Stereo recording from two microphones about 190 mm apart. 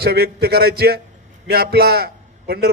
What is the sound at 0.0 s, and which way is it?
A man's voice, 55° right (ahead or behind).